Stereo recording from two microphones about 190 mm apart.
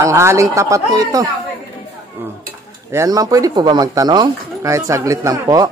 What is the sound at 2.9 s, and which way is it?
Speech, 15° right (ahead or behind).